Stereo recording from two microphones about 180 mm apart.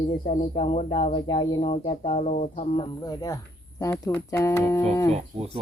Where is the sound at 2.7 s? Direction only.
25° left (ahead or behind).